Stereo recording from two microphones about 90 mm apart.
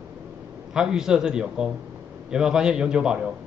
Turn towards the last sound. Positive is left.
turn(degrees=-10)  # may be behind; listen again after turning